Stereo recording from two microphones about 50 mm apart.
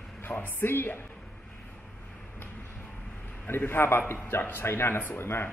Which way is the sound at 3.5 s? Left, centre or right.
Left.